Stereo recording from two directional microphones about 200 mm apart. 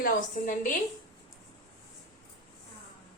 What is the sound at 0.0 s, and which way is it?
Speech, 40° left (ahead or behind).